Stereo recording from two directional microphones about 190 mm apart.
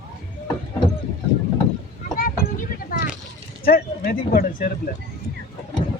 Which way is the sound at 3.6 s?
50° left (ahead or behind).